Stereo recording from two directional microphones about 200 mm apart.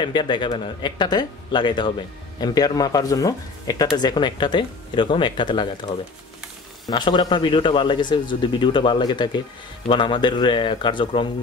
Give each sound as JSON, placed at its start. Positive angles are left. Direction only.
{"t": 0.0, "sound": "speech", "side_deg": 25}
{"t": 6.9, "sound": "speech", "side_deg": 20}